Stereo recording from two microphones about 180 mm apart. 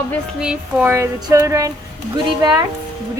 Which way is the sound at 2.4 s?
20° right (ahead or behind).